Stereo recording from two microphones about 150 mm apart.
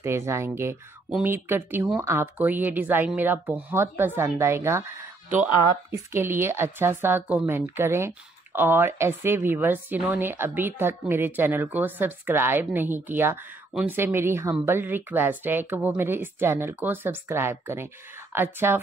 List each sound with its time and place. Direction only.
0.0 s a woman's voice: 15° right (ahead or behind)
6.1 s a woman's voice: 15° right (ahead or behind)